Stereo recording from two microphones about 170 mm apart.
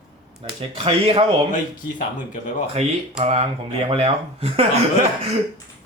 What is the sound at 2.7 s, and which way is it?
Speech, 35° right (ahead or behind).